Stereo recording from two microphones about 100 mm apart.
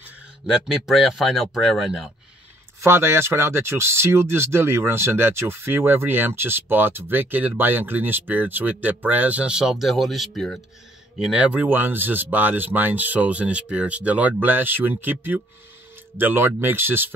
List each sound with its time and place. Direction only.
0.8 s speech: centre (ahead or behind)
2.8 s speech: 25° right (ahead or behind); by 10.6 s 5° left (ahead or behind)
11.1 s speech: 10° right (ahead or behind)